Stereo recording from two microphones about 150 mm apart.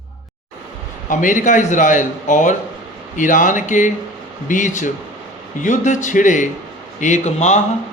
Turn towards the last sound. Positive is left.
turn(degrees=50)  # may be behind; listen again after turning